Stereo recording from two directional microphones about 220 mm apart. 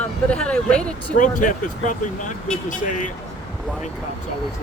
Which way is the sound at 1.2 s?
35° left (ahead or behind).